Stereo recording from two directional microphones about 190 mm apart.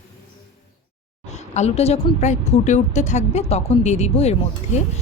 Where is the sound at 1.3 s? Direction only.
35° left (ahead or behind).